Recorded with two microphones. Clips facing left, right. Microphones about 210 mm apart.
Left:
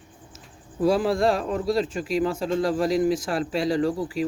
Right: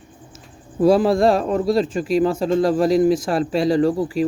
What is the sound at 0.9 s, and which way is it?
Speech, 35° right (ahead or behind).